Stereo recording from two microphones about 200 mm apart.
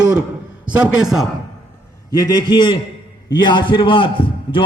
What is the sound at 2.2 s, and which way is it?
A man's voice, 20° left (ahead or behind).